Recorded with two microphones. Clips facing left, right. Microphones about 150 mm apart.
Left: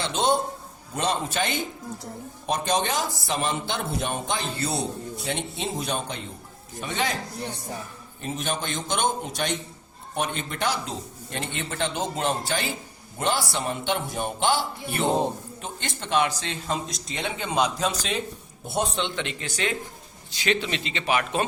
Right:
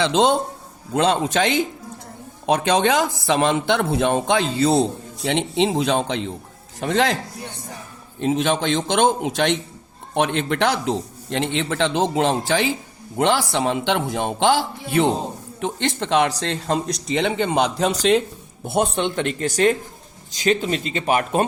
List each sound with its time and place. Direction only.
0.0 s a man's voice: 80° right
5.2 s speech: 85° right
8.2 s a man's voice: 85° right
15.6 s a man's voice: 80° right
16.4 s a man's voice: 60° right (ahead or behind)
16.8 s speech: centre (ahead or behind)
17.2 s a man's voice: 65° right (ahead or behind); by 21.4 s 45° right (ahead or behind)